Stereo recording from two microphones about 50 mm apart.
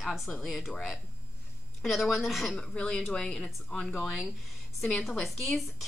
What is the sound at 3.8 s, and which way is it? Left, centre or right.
Speech, left.